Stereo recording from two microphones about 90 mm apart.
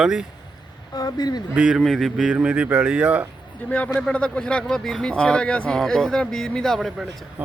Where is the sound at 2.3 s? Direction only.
15° right (ahead or behind).